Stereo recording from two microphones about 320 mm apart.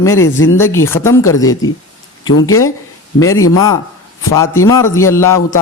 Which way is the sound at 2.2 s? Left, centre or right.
Left.